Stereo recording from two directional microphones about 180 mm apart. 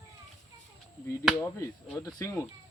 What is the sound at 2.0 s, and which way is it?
Speech, 20° left (ahead or behind).